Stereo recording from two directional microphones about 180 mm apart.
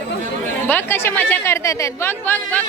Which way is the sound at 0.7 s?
10° left (ahead or behind).